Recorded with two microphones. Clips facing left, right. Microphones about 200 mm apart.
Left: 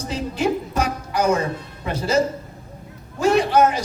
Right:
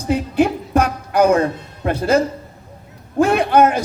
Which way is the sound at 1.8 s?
55° right (ahead or behind).